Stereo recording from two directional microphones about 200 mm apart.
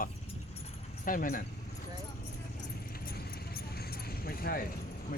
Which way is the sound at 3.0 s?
50° left (ahead or behind).